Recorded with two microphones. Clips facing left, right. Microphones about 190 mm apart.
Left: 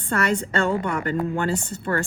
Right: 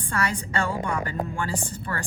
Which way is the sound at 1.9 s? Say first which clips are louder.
Left 9 dB; 50° left (ahead or behind).